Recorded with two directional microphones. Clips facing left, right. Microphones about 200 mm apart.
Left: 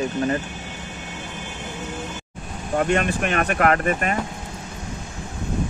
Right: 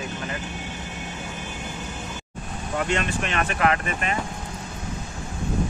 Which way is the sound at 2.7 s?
50° left (ahead or behind).